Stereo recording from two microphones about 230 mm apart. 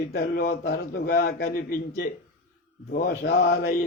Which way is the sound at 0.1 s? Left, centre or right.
Left.